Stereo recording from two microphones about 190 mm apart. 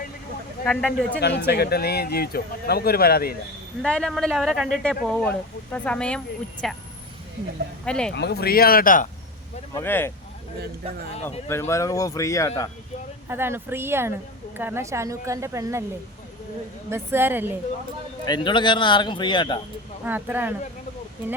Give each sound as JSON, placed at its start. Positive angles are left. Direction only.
{"t": 0.6, "sound": "speech", "side_deg": 5}
{"t": 1.2, "sound": "speech", "side_deg": 60}
{"t": 3.8, "sound": "speech", "side_deg": 5}
{"t": 7.9, "sound": "speech", "side_deg": 5}
{"t": 8.1, "sound": "speech", "side_deg": 60}
{"t": 9.7, "sound": "speech", "side_deg": 10}
{"t": 11.4, "sound": "speech", "side_deg": 15}
{"t": 13.2, "sound": "speech", "side_deg": -10}
{"t": 16.9, "sound": "speech", "side_deg": -10}
{"t": 18.3, "sound": "a man's voice", "side_deg": 25}
{"t": 20.1, "sound": "speech", "side_deg": -10}